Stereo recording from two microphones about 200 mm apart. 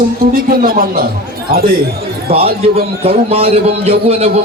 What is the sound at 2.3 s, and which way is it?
A man's voice, 30° right (ahead or behind).